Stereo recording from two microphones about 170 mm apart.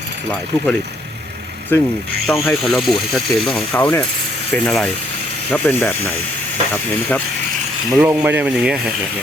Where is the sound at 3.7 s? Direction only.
15° left (ahead or behind).